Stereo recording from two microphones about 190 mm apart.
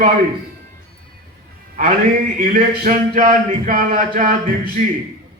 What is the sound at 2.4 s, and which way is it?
A man's voice, 45° right (ahead or behind).